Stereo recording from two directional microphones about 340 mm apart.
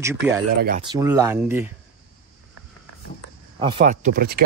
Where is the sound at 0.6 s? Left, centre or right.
Right.